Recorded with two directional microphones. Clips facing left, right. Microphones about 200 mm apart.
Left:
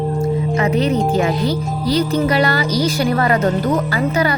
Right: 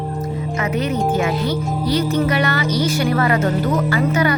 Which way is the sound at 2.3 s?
35° left (ahead or behind).